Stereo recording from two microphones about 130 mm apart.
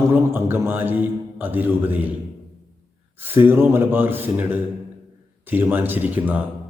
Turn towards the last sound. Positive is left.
turn(degrees=-15)  # may be behind; listen again after turning